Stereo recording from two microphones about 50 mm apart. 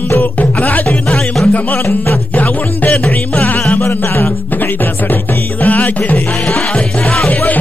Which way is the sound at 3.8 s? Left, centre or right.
Left.